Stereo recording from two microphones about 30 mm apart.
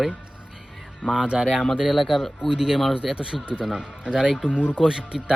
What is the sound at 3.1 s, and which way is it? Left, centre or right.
Speech, right.